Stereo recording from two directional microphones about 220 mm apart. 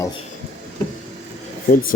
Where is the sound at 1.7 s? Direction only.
40° left (ahead or behind).